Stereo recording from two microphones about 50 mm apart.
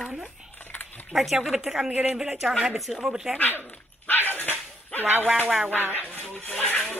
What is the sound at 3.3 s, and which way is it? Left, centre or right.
Dog, left.